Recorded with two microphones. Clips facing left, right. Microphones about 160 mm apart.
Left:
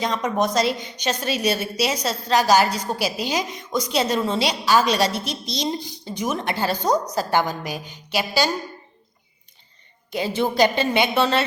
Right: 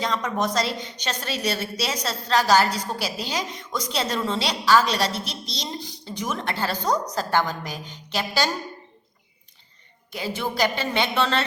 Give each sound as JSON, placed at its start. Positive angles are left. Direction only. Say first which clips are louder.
{"t": 0.0, "sound": "a woman's voice", "louder": "left 3 dB", "side_deg": 15}
{"t": 10.1, "sound": "a woman's voice", "louder": "left 6 dB", "side_deg": 20}